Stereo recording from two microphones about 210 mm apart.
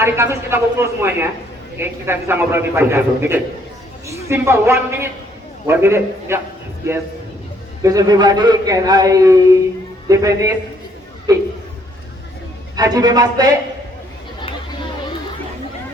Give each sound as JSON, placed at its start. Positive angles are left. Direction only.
{"t": 0.0, "sound": "a man's voice", "side_deg": -10}
{"t": 7.8, "sound": "a man's voice", "side_deg": -15}
{"t": 12.7, "sound": "a man's voice", "side_deg": -20}